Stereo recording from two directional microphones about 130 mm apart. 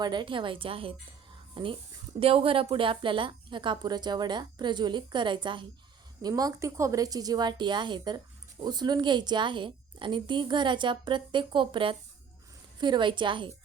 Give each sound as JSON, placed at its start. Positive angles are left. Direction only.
{"t": 0.0, "sound": "a woman's voice", "side_deg": -35}